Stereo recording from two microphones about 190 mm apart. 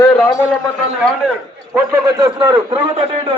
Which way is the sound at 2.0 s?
20° right (ahead or behind).